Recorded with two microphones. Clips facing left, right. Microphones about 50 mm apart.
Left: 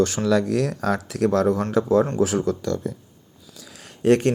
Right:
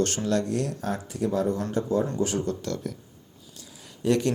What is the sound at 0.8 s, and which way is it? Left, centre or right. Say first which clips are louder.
Speech: left 7 dB; left.